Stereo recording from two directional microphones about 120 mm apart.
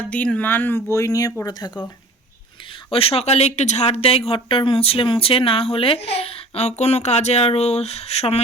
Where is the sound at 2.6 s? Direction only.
45° left (ahead or behind).